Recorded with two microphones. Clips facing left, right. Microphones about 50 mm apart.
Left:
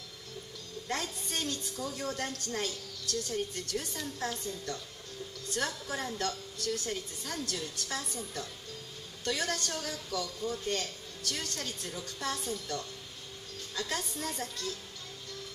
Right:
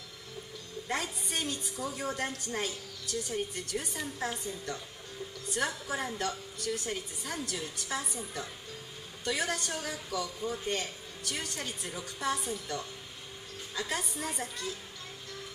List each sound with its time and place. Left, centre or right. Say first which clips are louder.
0.8 s a woman's voice: right 1 dB; centre